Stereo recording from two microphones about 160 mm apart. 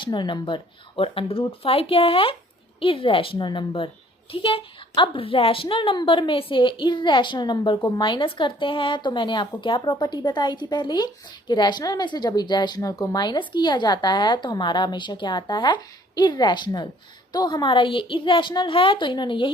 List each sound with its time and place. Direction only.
0.0 s a woman's voice: 30° left (ahead or behind)